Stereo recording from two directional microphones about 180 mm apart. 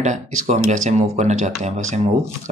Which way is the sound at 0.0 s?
40° right (ahead or behind).